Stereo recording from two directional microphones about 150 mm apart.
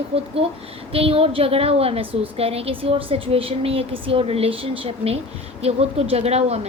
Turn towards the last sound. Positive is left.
turn(degrees=-45)  # may be behind; listen again after turning